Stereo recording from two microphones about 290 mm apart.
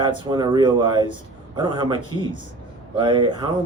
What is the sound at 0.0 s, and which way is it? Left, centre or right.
Speech, centre.